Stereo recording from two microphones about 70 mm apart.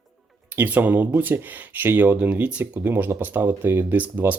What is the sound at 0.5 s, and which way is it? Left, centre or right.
Speech, right.